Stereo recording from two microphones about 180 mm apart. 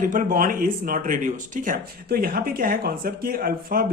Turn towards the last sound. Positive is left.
turn(degrees=-55)  # may be behind; listen again after turning